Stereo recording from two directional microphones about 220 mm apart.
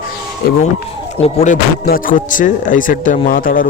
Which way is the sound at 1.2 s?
30° left (ahead or behind).